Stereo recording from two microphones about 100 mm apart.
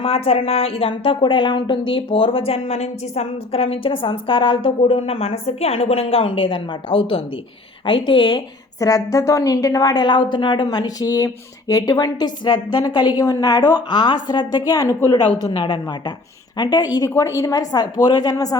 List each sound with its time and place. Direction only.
0.0 s a woman's voice: 90° left; by 8.4 s 55° left (ahead or behind)
8.8 s a woman's voice: 35° left (ahead or behind)
14.7 s a woman's voice: 35° left (ahead or behind)
15.4 s a woman's voice: 45° left (ahead or behind)